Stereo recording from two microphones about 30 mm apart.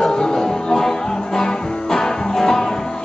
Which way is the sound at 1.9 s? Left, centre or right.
Centre.